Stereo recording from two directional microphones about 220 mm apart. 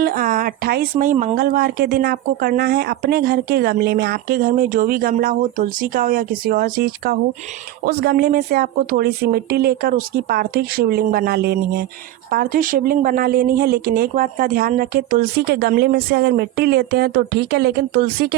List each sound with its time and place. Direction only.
0.0 s speech: 40° right (ahead or behind)